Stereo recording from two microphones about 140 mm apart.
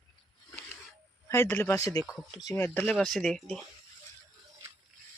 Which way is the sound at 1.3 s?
20° left (ahead or behind).